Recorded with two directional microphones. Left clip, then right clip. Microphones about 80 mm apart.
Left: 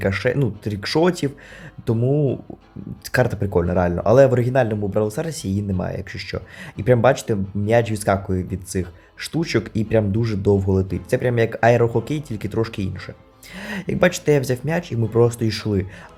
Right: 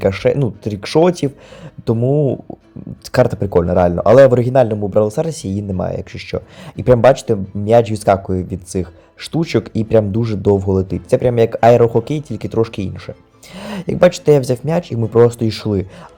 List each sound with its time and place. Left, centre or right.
0.0 s speech: right
2.0 s speech: centre
3.1 s speech: right